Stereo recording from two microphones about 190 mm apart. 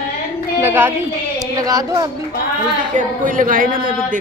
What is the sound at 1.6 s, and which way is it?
Speech, 20° right (ahead or behind).